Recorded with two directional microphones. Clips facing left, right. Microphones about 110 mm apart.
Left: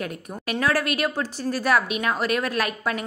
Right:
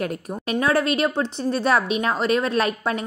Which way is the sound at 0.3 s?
25° right (ahead or behind).